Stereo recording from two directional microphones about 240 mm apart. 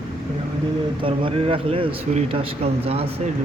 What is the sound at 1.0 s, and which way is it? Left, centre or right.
Speech, right.